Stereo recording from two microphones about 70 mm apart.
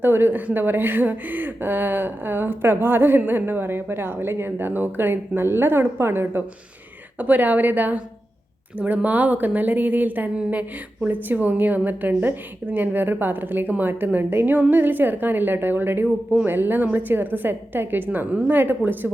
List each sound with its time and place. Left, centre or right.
0.0 s a woman's voice: right